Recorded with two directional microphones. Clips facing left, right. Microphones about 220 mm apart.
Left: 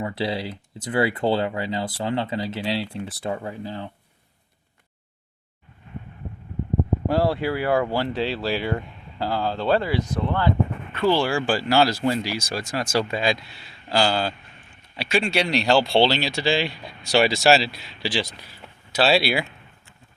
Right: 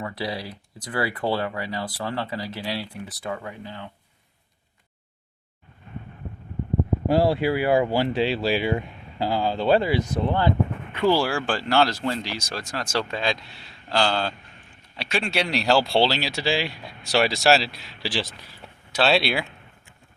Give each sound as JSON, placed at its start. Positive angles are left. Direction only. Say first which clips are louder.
{"t": 0.0, "sound": "speech", "louder": "left 4 dB", "side_deg": 25}
{"t": 7.1, "sound": "speech", "louder": "right 3 dB", "side_deg": -15}